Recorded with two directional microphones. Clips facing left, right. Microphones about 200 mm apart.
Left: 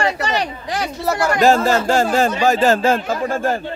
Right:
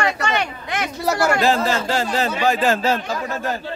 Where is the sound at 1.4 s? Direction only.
45° left (ahead or behind).